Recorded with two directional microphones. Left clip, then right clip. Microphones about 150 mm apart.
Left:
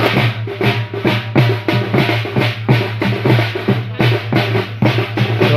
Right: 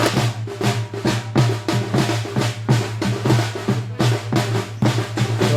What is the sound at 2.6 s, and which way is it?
Music, 50° left (ahead or behind).